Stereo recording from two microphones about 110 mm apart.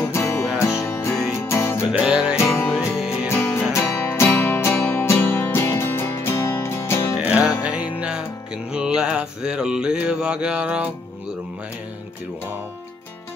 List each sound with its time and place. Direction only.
0.1 s music: 25° left (ahead or behind)
1.9 s music: 10° right (ahead or behind)
2.3 s music: 25° left (ahead or behind)
7.2 s music: 10° right (ahead or behind)
8.7 s mantra: 10° right (ahead or behind)